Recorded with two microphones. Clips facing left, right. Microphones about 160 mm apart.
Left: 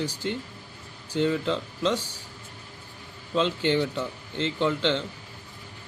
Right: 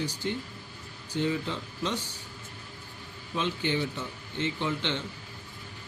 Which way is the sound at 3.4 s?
85° left.